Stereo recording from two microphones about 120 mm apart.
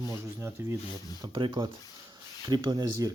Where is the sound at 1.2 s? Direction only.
40° right (ahead or behind).